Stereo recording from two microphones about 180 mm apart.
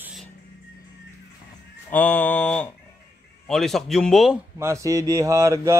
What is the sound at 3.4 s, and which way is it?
Speech, centre (ahead or behind).